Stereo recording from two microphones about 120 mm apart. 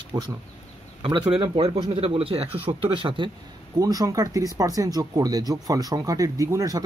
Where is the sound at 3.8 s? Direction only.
30° right (ahead or behind).